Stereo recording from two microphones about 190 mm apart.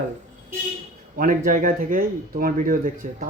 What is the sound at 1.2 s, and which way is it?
Speech, 45° right (ahead or behind).